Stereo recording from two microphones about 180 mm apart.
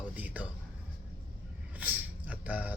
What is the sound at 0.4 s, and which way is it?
Speech, 10° right (ahead or behind).